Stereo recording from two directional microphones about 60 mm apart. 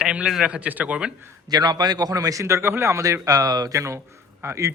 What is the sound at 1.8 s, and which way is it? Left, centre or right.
Speech, right.